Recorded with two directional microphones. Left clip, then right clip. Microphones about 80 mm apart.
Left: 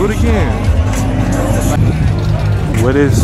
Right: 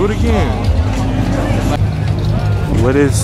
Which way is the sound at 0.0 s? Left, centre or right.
Centre.